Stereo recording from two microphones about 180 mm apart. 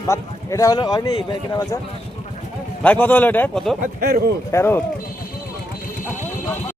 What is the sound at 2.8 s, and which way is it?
Speech, 10° left (ahead or behind).